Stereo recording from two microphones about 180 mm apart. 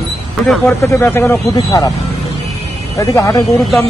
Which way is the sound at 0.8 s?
15° left (ahead or behind).